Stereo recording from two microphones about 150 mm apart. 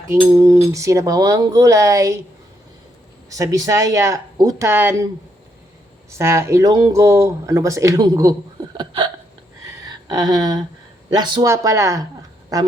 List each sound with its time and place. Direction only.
0.3 s speech: 20° right (ahead or behind)
3.2 s speech: 20° right (ahead or behind)
6.1 s speech: 20° right (ahead or behind)
8.8 s hiccup: 30° right (ahead or behind)
9.6 s a sound: 25° right (ahead or behind)
11.1 s speech: 30° right (ahead or behind)
11.4 s speech: 20° right (ahead or behind)